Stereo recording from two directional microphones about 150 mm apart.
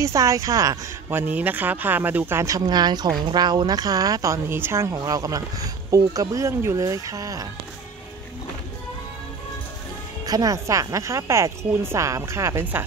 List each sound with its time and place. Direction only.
0.0 s speech: 20° right (ahead or behind)
1.2 s speech: 10° right (ahead or behind)
10.2 s speech: 25° right (ahead or behind)